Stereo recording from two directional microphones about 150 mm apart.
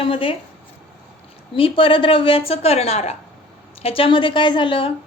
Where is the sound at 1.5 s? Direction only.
35° left (ahead or behind).